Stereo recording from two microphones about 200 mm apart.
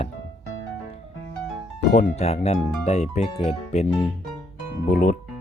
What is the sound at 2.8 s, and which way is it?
Speech, 35° left (ahead or behind).